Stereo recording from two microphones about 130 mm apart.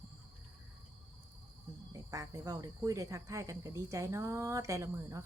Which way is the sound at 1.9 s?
25° right (ahead or behind).